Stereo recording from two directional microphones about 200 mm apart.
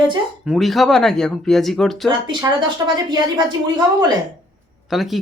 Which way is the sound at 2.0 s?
20° right (ahead or behind).